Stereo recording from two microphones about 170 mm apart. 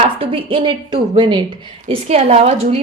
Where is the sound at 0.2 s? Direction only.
35° right (ahead or behind).